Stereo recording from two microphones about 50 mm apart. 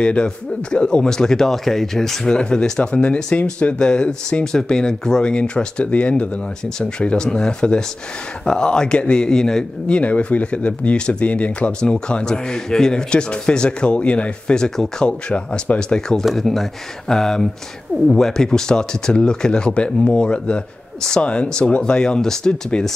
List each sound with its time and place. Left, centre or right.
0.0 s speech: left
11.8 s speech: centre
16.3 s speech: centre